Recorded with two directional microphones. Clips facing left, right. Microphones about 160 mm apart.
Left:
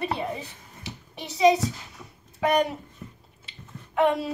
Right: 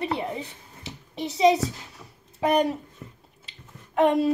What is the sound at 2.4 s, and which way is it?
Speech, 30° right (ahead or behind).